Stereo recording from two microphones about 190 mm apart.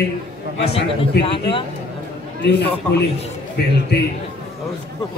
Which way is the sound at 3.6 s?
55° left (ahead or behind).